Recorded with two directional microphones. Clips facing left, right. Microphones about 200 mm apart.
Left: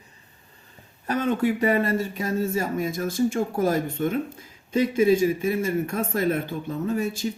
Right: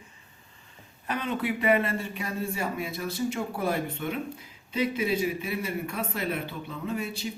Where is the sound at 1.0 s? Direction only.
40° left (ahead or behind).